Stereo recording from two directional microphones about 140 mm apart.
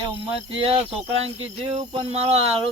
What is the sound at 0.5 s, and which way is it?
Speech, 40° right (ahead or behind).